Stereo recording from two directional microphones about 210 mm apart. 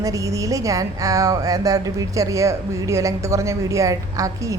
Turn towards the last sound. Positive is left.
turn(degrees=-15)  # may be behind; listen again after turning